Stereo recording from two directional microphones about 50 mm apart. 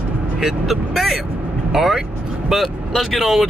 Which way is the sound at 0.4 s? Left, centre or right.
Centre.